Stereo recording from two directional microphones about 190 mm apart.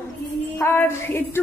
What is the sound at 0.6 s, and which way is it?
Speech, 10° left (ahead or behind).